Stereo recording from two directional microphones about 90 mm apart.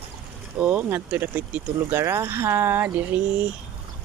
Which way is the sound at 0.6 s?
20° right (ahead or behind).